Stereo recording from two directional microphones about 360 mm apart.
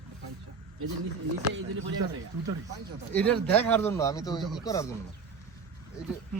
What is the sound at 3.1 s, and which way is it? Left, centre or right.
A man's voice, centre.